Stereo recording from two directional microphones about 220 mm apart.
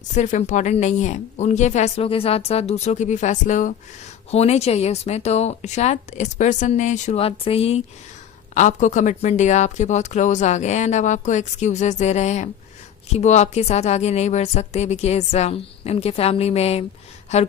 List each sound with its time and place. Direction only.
0.1 s speech: 35° left (ahead or behind)